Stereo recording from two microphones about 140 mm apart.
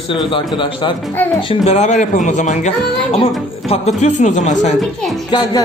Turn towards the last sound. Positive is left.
turn(degrees=30)  # may be behind; listen again after turning